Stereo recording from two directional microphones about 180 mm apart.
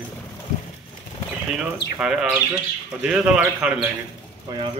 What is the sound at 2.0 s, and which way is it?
Speech, 5° right (ahead or behind).